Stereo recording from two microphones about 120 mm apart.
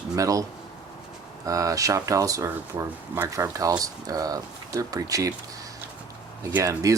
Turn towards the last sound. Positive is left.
turn(degrees=-30)  # may be behind; listen again after turning